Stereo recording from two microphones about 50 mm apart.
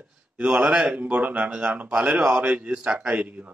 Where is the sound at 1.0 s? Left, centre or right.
Right.